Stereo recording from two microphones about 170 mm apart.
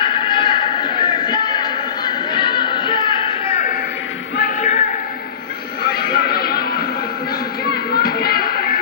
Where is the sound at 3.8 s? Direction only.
90° left.